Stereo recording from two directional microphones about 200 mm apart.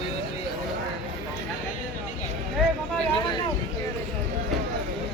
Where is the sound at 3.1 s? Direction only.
25° left (ahead or behind).